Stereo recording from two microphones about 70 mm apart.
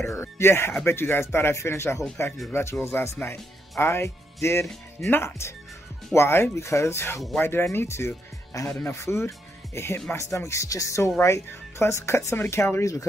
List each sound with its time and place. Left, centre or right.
0.0 s speech: left